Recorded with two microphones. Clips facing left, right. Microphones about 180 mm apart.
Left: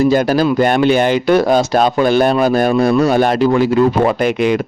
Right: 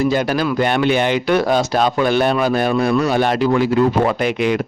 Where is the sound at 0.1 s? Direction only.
40° left (ahead or behind).